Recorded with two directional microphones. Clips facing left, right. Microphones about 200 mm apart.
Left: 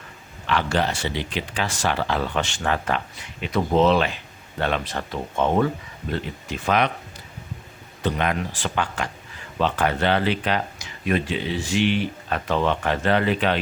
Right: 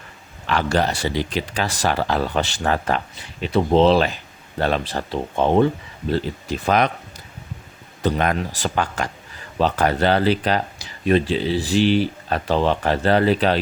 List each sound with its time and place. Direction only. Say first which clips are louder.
0.4 s speech: right 3 dB; 40° right (ahead or behind)
8.0 s speech: right 3 dB; 40° right (ahead or behind)